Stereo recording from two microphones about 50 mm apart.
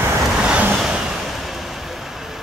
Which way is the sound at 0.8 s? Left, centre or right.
Centre.